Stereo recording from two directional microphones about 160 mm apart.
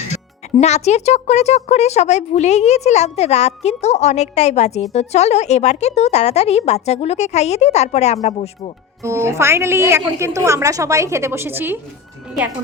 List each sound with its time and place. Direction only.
0.6 s speech: 45° left (ahead or behind)
9.0 s a woman's voice: 15° right (ahead or behind)